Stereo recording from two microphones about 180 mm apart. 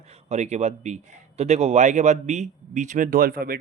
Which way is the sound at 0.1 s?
35° right (ahead or behind).